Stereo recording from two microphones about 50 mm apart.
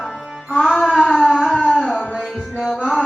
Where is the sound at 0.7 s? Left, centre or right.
Centre.